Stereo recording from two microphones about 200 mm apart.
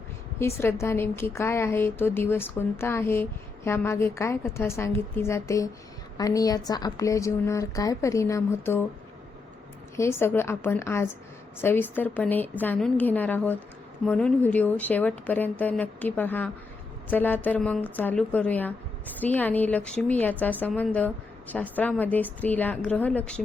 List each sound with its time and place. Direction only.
0.3 s a woman's voice: 15° left (ahead or behind)
9.9 s a woman's voice: 15° left (ahead or behind)